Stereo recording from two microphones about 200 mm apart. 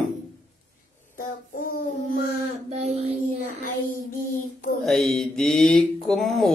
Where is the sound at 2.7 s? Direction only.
30° right (ahead or behind).